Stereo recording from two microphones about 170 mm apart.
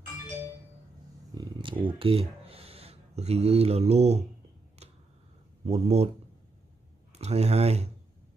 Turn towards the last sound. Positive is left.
turn(degrees=-40)  # may be behind; listen again after turning